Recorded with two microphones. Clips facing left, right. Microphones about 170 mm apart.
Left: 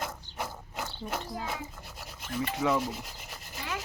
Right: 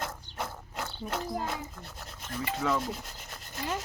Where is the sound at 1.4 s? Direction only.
Centre (ahead or behind).